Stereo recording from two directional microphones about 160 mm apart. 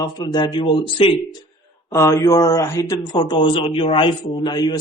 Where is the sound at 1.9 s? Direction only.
20° left (ahead or behind).